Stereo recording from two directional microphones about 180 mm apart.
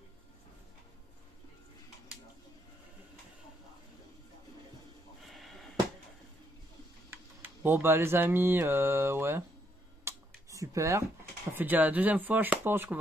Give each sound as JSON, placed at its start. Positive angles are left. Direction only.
{"t": 5.2, "sound": "a sound", "side_deg": 0}
{"t": 7.1, "sound": "mantra", "side_deg": -10}
{"t": 10.0, "sound": "finger snapping", "side_deg": -20}
{"t": 11.5, "sound": "speech", "side_deg": -10}